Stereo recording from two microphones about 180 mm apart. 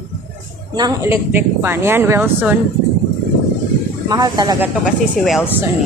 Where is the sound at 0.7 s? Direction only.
20° right (ahead or behind).